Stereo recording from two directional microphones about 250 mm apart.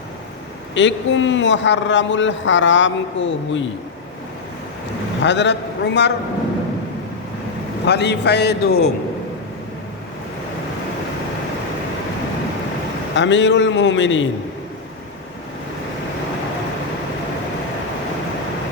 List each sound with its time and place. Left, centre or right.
0.7 s a man's voice: left
5.2 s a man's voice: left
7.9 s a man's voice: left
13.1 s a man's voice: left